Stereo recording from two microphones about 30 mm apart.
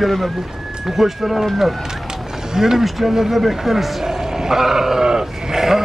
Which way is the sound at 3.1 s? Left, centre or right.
Centre.